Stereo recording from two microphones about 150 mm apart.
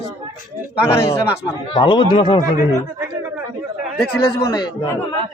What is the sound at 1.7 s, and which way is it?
Speech, 35° left (ahead or behind).